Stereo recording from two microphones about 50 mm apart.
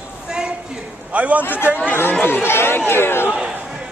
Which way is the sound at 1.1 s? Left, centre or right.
Right.